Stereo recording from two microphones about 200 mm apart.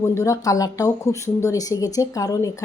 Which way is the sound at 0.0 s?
15° left (ahead or behind).